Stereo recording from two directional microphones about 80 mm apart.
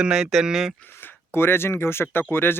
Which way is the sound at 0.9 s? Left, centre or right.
Left.